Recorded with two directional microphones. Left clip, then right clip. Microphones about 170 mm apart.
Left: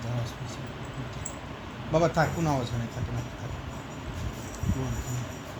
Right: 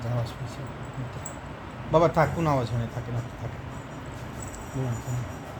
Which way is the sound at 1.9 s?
45° right (ahead or behind).